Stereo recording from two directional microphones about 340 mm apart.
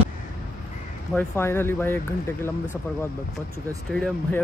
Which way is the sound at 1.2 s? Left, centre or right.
Centre.